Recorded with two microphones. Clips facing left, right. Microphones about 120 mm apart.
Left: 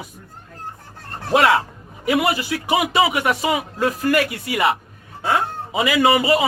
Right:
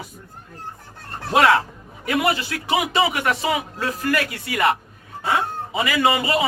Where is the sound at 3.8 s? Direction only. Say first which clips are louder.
Left 5 dB; 20° left (ahead or behind).